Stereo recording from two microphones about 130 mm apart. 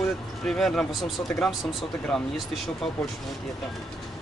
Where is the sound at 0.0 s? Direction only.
Centre (ahead or behind).